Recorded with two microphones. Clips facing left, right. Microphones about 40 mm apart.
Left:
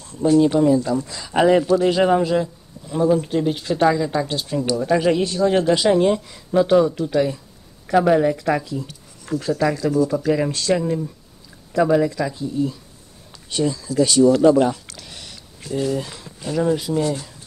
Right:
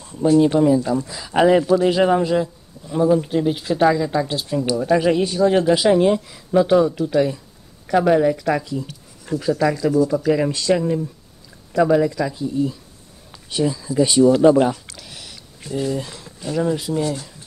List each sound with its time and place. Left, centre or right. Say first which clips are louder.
0.2 s speech: right 1 dB; centre
13.7 s speech: even; centre
15.0 s a sound: even; centre
16.0 s speech: left 1 dB; centre